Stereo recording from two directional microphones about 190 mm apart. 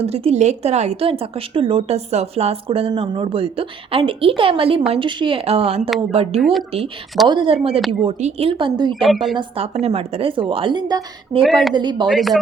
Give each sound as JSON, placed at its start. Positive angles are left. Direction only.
{"t": 0.0, "sound": "a woman's voice", "side_deg": -30}
{"t": 9.0, "sound": "a woman's voice", "side_deg": 0}
{"t": 9.6, "sound": "a woman's voice", "side_deg": -35}
{"t": 11.4, "sound": "a woman's voice", "side_deg": 0}
{"t": 11.7, "sound": "a woman's voice", "side_deg": -25}
{"t": 12.1, "sound": "a woman's voice", "side_deg": 0}